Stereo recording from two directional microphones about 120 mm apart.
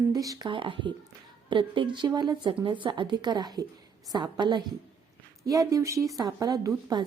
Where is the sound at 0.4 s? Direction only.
45° right (ahead or behind).